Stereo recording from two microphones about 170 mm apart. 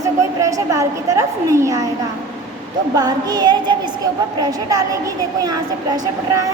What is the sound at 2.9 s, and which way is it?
A woman's voice, 25° right (ahead or behind).